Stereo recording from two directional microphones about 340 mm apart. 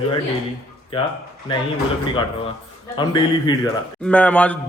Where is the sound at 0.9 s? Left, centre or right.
Centre.